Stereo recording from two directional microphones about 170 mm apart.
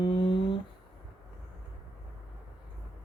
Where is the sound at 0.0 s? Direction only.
30° left (ahead or behind).